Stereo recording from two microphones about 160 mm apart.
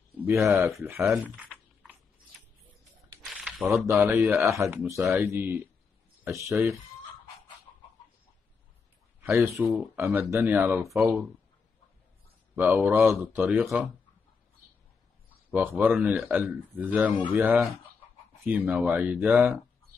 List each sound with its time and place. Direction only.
0.5 s speech: 20° right (ahead or behind)
3.4 s a sound: centre (ahead or behind)
3.8 s speech: 15° right (ahead or behind)
9.2 s speech: 15° right (ahead or behind)
12.5 s speech: 10° right (ahead or behind)
15.5 s speech: 10° right (ahead or behind)